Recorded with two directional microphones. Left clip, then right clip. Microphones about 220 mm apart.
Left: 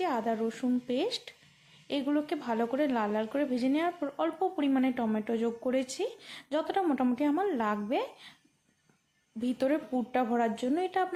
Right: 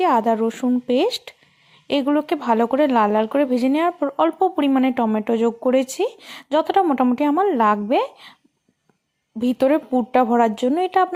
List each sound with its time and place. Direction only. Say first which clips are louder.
0.0 s speech: right 13 dB; 30° right (ahead or behind)
9.4 s speech: right 12 dB; 25° right (ahead or behind)